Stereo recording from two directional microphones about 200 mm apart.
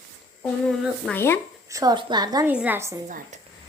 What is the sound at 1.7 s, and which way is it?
Speech, 20° right (ahead or behind).